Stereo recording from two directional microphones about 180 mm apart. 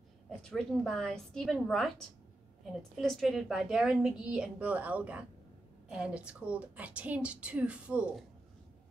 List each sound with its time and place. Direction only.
0.4 s a woman's voice: 5° left (ahead or behind)